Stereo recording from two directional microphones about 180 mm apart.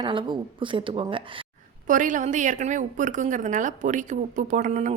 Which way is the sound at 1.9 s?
45° right (ahead or behind).